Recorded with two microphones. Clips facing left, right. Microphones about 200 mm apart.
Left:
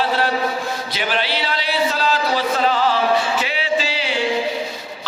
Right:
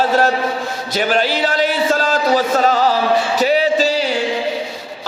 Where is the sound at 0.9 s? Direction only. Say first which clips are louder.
Right 8 dB; 45° right (ahead or behind).